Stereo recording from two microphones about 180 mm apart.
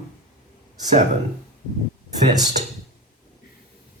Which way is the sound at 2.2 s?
40° right (ahead or behind).